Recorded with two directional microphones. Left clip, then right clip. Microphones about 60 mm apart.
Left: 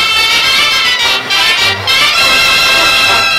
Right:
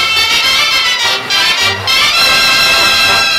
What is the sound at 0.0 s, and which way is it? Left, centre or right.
Music, centre.